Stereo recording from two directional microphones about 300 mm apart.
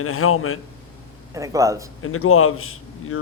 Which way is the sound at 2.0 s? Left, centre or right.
Left.